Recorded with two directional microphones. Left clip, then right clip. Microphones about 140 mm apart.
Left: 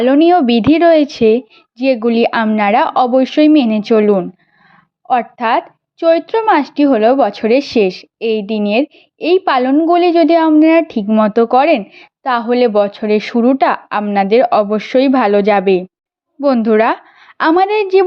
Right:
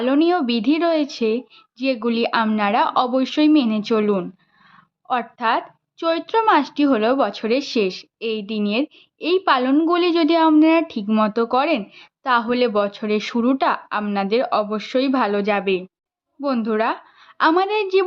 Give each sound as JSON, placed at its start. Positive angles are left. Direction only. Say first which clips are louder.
{"t": 0.0, "sound": "speech", "louder": "left 9 dB", "side_deg": 35}
{"t": 6.0, "sound": "speech", "louder": "left 7 dB", "side_deg": 25}
{"t": 16.6, "sound": "a sound", "louder": "left 9 dB", "side_deg": 45}
{"t": 17.6, "sound": "speech", "louder": "left 7 dB", "side_deg": 35}